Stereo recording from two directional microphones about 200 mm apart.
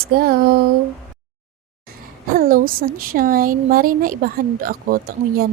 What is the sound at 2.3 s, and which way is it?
Speech, 45° right (ahead or behind).